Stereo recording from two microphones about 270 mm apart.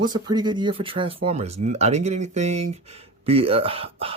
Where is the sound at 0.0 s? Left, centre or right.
Centre.